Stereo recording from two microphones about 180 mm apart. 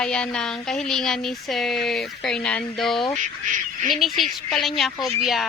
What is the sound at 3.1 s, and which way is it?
Speech, 45° right (ahead or behind).